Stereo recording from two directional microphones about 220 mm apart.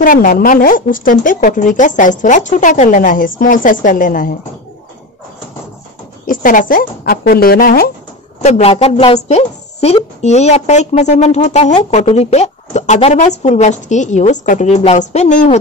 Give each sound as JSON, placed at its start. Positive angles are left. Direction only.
{"t": 0.0, "sound": "a woman's voice", "side_deg": 40}
{"t": 6.2, "sound": "a woman's voice", "side_deg": 35}
{"t": 8.4, "sound": "a woman's voice", "side_deg": 30}